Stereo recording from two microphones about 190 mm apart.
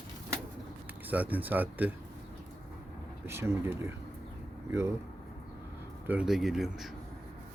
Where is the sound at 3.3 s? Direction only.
15° right (ahead or behind).